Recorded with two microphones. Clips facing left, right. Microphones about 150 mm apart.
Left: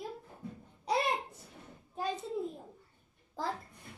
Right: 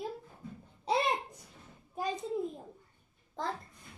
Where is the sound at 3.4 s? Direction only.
5° left (ahead or behind).